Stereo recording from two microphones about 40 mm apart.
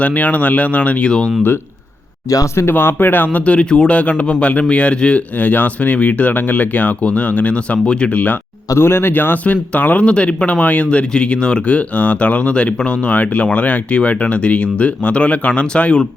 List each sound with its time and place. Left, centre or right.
0.0 s speech: left
2.6 s speech: left
5.4 s speech: left
7.5 s speech: left
8.1 s speech: left
8.8 s speech: left
9.1 s speech: left
10.8 s speech: left